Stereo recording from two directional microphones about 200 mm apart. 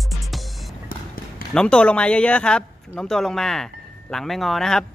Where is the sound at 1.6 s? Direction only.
5° left (ahead or behind).